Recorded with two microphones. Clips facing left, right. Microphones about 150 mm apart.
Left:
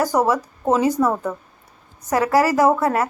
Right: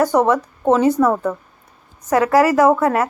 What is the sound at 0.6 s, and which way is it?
Speech, 30° right (ahead or behind).